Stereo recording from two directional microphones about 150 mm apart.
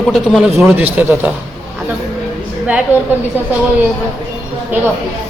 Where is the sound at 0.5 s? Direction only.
15° right (ahead or behind).